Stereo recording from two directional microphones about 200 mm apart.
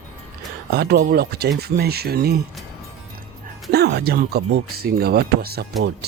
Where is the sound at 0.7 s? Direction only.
50° right (ahead or behind).